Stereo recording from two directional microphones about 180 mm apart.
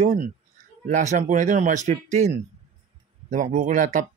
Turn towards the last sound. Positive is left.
turn(degrees=-45)  # may be behind; listen again after turning